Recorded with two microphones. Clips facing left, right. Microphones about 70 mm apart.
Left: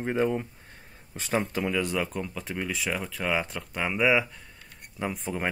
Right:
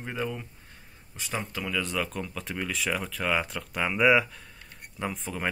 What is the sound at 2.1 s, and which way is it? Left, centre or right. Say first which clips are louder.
Speech: left 1 dB; centre.